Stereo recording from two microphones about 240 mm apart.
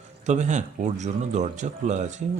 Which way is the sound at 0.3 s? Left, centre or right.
Right.